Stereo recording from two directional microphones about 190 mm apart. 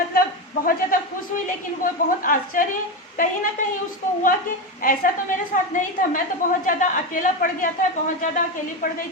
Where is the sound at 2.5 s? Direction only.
45° left (ahead or behind).